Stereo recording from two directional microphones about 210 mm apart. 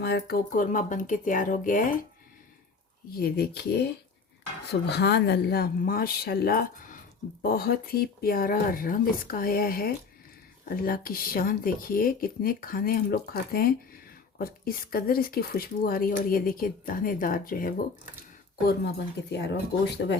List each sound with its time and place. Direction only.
0.0 s speech: 50° left (ahead or behind)
3.2 s speech: 45° left (ahead or behind)